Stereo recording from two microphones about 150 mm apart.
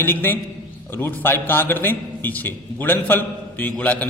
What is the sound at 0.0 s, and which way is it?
A man's voice, 15° left (ahead or behind).